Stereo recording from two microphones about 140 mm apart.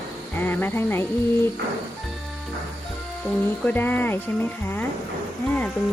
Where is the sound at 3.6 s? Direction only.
15° left (ahead or behind).